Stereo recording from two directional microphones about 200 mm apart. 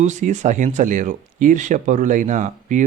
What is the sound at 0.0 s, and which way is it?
Speech, 35° right (ahead or behind).